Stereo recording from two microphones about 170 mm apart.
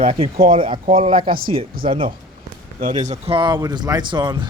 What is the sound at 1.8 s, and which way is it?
Speech, 60° right (ahead or behind).